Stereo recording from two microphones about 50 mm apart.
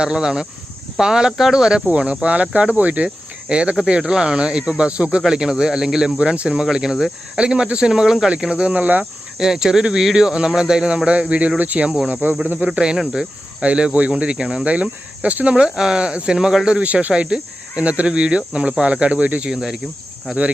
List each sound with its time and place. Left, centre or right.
0.0 s speech: centre
2.0 s speech: right
5.2 s speech: centre
6.1 s speech: right
9.4 s speech: centre; by 15.5 s right
15.5 s speech: centre
19.5 s speech: centre